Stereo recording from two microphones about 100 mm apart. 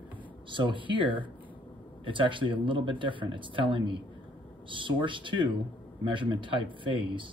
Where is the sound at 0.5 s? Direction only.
55° right (ahead or behind).